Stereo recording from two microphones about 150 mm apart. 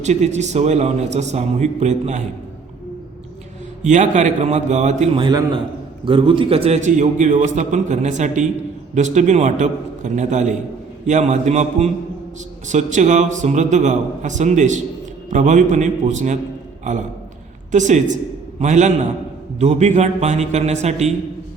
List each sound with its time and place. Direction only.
0.0 s a man's voice: 50° right (ahead or behind)
3.8 s a man's voice: 55° right (ahead or behind)
5.1 s a man's voice: 30° right (ahead or behind); by 21.1 s 45° right (ahead or behind)